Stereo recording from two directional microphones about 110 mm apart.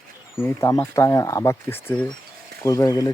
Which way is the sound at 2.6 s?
30° left (ahead or behind).